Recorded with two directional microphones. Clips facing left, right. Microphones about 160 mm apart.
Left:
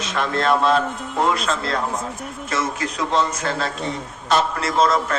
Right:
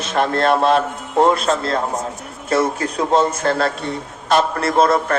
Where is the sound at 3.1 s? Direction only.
50° right (ahead or behind).